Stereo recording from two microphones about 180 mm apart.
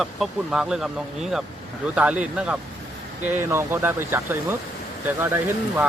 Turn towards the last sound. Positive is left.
turn(degrees=-10)  # may be behind; listen again after turning